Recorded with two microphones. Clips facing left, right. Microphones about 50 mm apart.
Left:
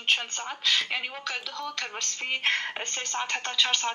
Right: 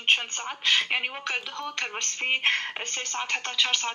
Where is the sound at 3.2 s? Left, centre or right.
Centre.